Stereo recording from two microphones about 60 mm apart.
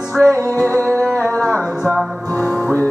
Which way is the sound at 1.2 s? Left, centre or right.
Left.